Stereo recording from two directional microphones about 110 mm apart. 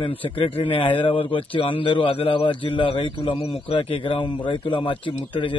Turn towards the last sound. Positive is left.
turn(degrees=50)  # may be behind; listen again after turning